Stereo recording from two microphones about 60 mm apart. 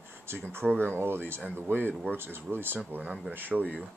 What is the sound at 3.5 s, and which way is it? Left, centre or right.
Speech, centre.